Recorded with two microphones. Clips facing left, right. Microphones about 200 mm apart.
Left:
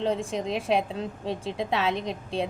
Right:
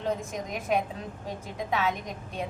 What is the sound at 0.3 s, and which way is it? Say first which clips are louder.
A woman's voice: left 4 dB; 30° left (ahead or behind).